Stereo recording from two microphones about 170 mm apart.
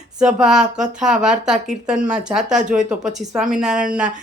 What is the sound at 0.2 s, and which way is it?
Speech, 5° right (ahead or behind).